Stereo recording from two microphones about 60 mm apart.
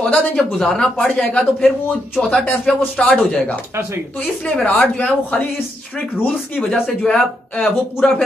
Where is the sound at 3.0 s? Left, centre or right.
Centre.